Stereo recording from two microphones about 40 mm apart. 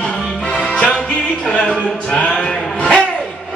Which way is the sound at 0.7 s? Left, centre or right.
Left.